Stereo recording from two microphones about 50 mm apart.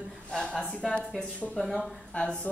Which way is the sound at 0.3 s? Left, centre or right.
Centre.